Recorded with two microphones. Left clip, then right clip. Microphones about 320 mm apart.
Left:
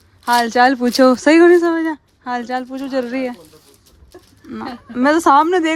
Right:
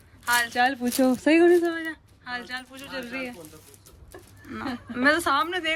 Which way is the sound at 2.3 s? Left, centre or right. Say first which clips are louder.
Left 12 dB; centre.